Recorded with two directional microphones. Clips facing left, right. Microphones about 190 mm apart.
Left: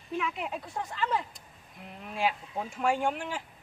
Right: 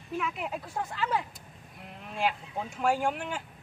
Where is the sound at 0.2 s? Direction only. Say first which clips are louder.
Right 1 dB; 5° right (ahead or behind).